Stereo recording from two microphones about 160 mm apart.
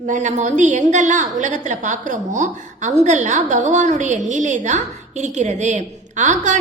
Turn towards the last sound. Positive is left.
turn(degrees=-50)  # may be behind; listen again after turning